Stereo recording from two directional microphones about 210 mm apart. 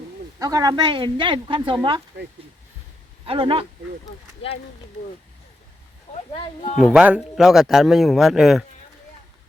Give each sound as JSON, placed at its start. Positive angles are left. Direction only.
{"t": 0.3, "sound": "a woman's voice", "side_deg": -15}
{"t": 3.2, "sound": "a woman's voice", "side_deg": -25}
{"t": 6.7, "sound": "speech", "side_deg": 35}
{"t": 6.9, "sound": "a man's voice", "side_deg": -5}